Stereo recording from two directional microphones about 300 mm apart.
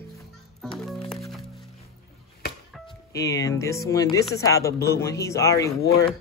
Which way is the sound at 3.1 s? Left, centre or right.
Centre.